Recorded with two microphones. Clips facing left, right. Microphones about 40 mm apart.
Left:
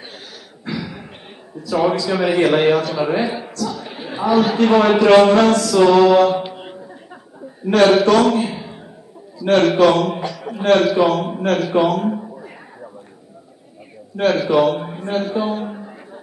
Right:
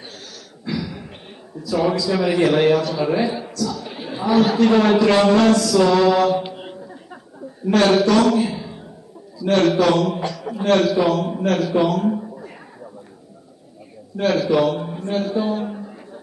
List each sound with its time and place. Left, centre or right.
0.7 s a sound: left
1.7 s a man's voice: centre
4.1 s a man's voice: centre
4.6 s a man's voice: centre
4.9 s a man's voice: left
6.3 s a sound: centre
7.6 s speech: centre
8.0 s a man's voice: left
10.2 s a sound: centre
10.7 s a man's voice: left
14.2 s a man's voice: left
14.5 s a man's voice: left
15.7 s music: left